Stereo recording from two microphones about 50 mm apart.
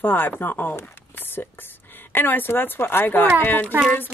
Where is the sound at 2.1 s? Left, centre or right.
Left.